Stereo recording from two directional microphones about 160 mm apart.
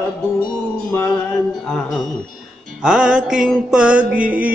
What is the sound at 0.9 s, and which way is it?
Music, 15° left (ahead or behind).